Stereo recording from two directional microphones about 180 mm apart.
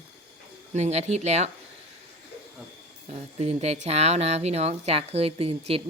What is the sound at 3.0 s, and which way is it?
Speech, 35° right (ahead or behind).